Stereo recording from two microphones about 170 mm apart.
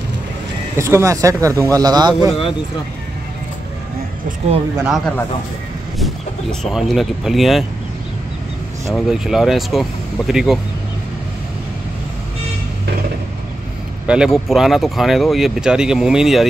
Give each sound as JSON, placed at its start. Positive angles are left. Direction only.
{"t": 0.7, "sound": "speech", "side_deg": -15}
{"t": 4.8, "sound": "speech", "side_deg": 0}
{"t": 6.6, "sound": "speech", "side_deg": 0}
{"t": 8.9, "sound": "speech", "side_deg": -5}
{"t": 14.0, "sound": "speech", "side_deg": -5}